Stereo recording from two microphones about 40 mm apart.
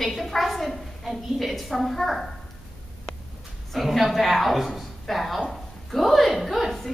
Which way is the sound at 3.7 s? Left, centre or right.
Centre.